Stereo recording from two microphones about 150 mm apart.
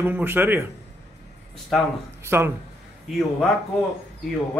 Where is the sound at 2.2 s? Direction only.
15° right (ahead or behind).